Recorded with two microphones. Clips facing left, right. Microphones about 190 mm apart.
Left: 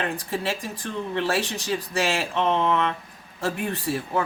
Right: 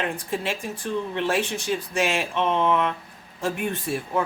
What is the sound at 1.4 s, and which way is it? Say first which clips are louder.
Speech: right 1 dB; 35° left (ahead or behind).